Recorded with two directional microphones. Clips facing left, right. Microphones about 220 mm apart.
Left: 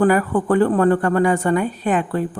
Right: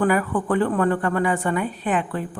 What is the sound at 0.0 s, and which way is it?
A woman's voice, 40° left (ahead or behind).